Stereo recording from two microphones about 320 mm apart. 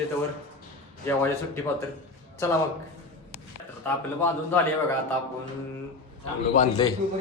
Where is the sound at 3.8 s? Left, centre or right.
Centre.